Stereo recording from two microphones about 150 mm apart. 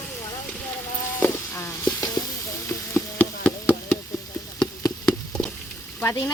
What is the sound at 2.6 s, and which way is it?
Frying, 15° left (ahead or behind).